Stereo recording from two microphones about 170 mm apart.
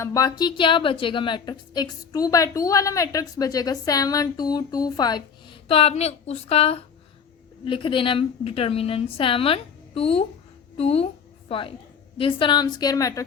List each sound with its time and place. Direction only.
0.0 s a woman's voice: 20° left (ahead or behind)
5.6 s a woman's voice: 35° left (ahead or behind)
10.8 s a sound: 35° left (ahead or behind)
12.1 s a woman's voice: 30° left (ahead or behind)